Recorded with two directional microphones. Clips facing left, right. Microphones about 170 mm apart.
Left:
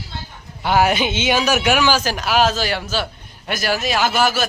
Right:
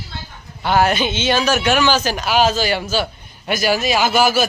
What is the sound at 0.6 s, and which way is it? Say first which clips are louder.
Speech: even; 10° left (ahead or behind).